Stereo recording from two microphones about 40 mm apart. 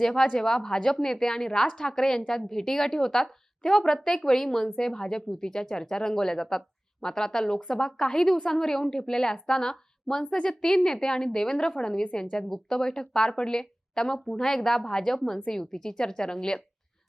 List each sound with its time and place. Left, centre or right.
0.0 s a woman's voice: centre